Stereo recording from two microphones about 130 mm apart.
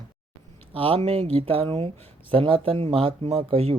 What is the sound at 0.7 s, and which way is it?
Speech, 45° right (ahead or behind).